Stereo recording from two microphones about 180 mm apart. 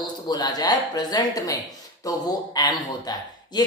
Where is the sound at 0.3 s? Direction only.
20° left (ahead or behind).